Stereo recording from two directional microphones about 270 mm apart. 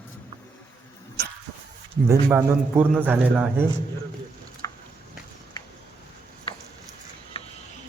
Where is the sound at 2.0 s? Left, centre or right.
Centre.